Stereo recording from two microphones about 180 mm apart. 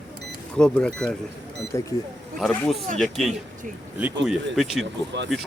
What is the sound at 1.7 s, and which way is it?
Speech, 15° left (ahead or behind).